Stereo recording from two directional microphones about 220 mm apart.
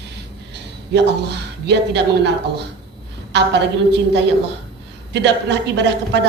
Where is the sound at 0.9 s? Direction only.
50° right (ahead or behind).